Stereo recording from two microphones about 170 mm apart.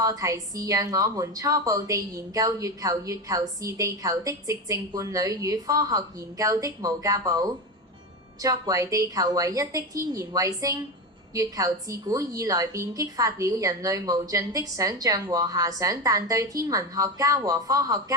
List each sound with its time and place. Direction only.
0.0 s a woman's voice: 20° right (ahead or behind)